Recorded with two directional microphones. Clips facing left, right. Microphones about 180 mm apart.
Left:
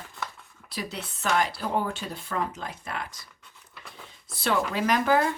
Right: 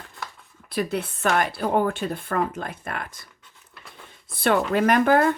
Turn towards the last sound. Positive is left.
turn(degrees=-55)  # may be behind; listen again after turning